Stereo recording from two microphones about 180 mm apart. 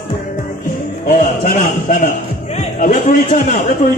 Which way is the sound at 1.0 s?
45° left (ahead or behind).